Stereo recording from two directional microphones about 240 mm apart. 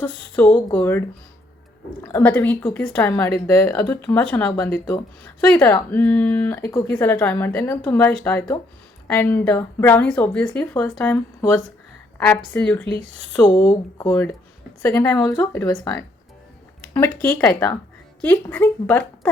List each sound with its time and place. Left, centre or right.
0.0 s a woman's voice: centre
2.0 s a woman's voice: centre
13.1 s speech: right
13.3 s a woman's voice: centre
17.2 s a woman's voice: centre